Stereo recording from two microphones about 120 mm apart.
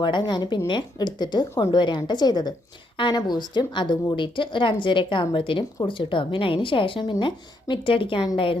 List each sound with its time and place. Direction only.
0.0 s a woman's voice: 40° left (ahead or behind)